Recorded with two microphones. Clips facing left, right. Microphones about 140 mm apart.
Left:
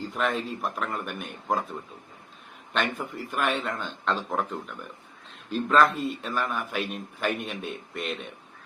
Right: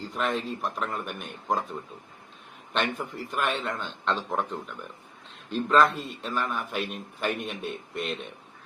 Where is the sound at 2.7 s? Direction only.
Centre (ahead or behind).